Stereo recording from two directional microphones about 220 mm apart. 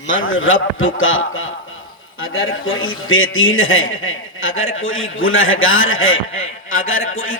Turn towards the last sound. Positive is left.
turn(degrees=65)  # may be behind; listen again after turning